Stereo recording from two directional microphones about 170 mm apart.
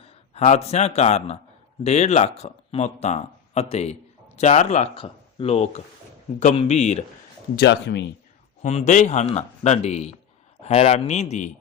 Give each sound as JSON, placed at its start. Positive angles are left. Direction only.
{"t": 0.0, "sound": "a man's voice", "side_deg": 40}
{"t": 7.5, "sound": "speech", "side_deg": 75}
{"t": 8.6, "sound": "speech", "side_deg": 45}